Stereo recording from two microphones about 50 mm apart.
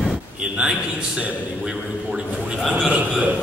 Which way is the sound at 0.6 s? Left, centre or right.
Centre.